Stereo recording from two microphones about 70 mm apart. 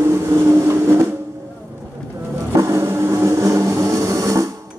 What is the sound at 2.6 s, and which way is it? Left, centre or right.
Vehicle, right.